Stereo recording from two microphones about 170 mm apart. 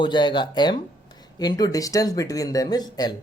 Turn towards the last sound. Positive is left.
turn(degrees=25)  # may be behind; listen again after turning